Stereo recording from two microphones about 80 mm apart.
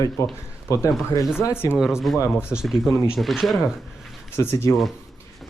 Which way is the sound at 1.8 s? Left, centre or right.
Centre.